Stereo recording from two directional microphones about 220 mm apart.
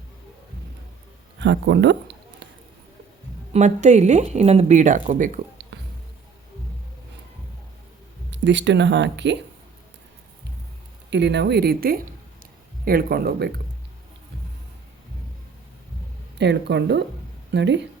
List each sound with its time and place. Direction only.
1.4 s a sound: 55° right (ahead or behind)
3.5 s speech: 30° right (ahead or behind)
5.7 s music: 50° right (ahead or behind)
8.3 s speech: 55° right (ahead or behind)
11.1 s speech: 50° right (ahead or behind)
16.4 s speech: 50° right (ahead or behind)